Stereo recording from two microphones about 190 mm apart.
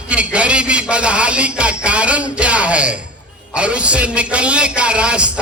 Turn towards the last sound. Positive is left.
turn(degrees=-5)  # may be behind; listen again after turning